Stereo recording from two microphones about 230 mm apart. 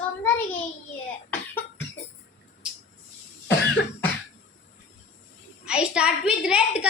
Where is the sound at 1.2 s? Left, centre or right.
Centre.